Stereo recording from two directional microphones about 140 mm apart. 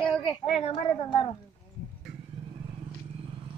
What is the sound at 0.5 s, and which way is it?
Speech, 55° left (ahead or behind).